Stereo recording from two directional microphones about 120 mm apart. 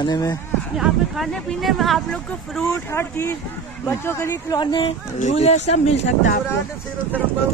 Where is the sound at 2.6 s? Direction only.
20° left (ahead or behind).